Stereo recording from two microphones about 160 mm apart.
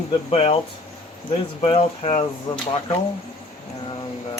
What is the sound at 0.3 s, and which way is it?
Speech, 40° left (ahead or behind).